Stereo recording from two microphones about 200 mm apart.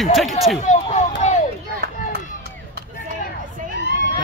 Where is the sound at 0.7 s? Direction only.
35° left (ahead or behind).